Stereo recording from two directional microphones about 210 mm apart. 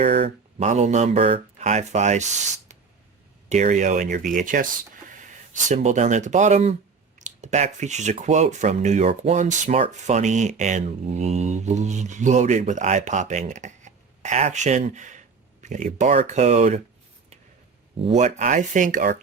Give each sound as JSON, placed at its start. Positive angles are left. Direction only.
{"t": 0.0, "sound": "speech", "side_deg": -30}
{"t": 18.0, "sound": "speech", "side_deg": -30}